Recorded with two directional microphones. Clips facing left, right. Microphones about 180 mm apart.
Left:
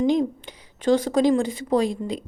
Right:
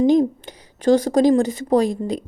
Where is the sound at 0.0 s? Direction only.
40° right (ahead or behind).